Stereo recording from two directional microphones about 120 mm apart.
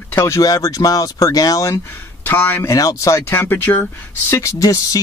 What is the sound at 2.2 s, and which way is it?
Speech, 15° left (ahead or behind).